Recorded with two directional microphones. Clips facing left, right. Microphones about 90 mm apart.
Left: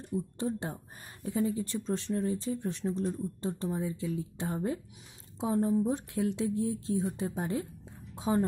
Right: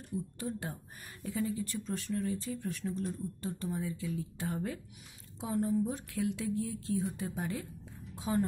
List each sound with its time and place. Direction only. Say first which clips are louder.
0.1 s speech: left 5 dB; 25° left (ahead or behind)